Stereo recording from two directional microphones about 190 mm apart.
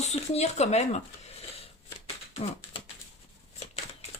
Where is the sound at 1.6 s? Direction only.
30° left (ahead or behind).